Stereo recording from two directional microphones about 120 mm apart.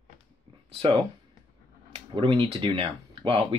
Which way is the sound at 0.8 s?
45° right (ahead or behind).